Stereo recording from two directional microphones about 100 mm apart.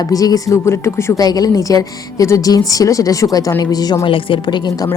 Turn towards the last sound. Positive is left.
turn(degrees=45)  # may be behind; listen again after turning